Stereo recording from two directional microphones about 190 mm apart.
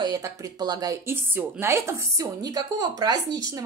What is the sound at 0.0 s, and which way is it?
A woman's voice, 20° right (ahead or behind).